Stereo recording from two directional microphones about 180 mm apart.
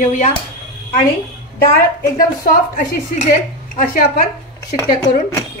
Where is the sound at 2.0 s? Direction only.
55° left (ahead or behind).